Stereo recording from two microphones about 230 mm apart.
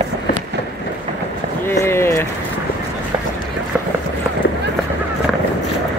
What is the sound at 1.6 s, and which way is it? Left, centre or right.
Run, centre.